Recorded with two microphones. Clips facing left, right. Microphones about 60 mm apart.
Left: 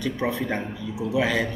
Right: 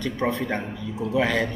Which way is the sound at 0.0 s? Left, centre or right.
Centre.